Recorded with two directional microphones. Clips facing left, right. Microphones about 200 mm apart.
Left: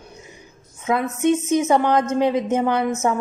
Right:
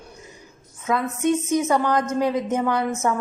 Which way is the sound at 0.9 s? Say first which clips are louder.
Left 2 dB; 20° left (ahead or behind).